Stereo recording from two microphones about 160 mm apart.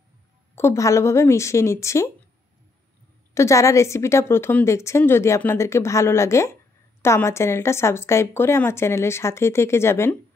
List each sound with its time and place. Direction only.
0.6 s a woman's voice: 20° left (ahead or behind)
3.3 s a woman's voice: 20° left (ahead or behind)